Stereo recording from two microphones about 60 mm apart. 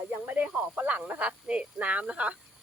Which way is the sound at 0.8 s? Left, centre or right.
Right.